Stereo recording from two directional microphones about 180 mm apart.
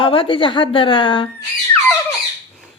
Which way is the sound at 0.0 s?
30° left (ahead or behind).